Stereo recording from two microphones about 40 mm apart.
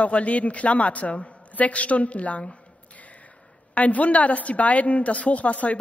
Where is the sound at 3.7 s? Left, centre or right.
Left.